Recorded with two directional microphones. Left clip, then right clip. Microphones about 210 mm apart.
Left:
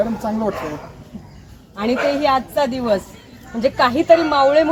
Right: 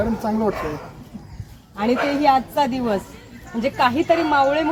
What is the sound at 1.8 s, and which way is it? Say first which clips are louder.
A woman's voice: left 2 dB; 20° left (ahead or behind).